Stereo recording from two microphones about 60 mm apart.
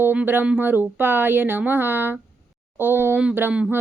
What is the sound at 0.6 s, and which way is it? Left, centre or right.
Speech, right.